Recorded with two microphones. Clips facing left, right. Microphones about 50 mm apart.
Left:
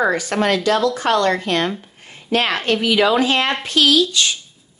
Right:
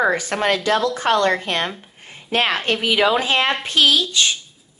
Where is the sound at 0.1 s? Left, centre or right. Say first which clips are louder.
Left 1 dB; right.